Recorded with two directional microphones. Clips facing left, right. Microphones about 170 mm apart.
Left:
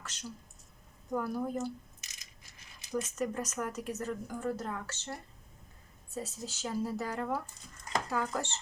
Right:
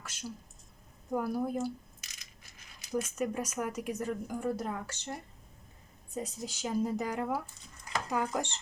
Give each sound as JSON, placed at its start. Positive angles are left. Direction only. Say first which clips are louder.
{"t": 0.0, "sound": "speech", "louder": "right 2 dB", "side_deg": -10}
{"t": 2.9, "sound": "speech", "louder": "right 1 dB", "side_deg": -10}
{"t": 6.1, "sound": "speech", "louder": "right 2 dB", "side_deg": -15}